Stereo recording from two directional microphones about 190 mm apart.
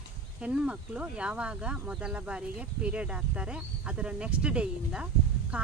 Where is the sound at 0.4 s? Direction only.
5° right (ahead or behind).